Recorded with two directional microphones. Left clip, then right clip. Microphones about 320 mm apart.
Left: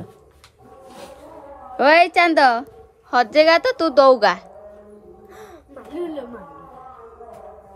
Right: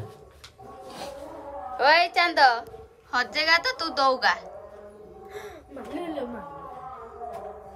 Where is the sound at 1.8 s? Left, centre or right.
Centre.